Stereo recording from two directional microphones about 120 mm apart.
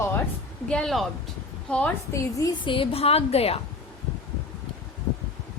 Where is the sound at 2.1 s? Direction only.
30° left (ahead or behind).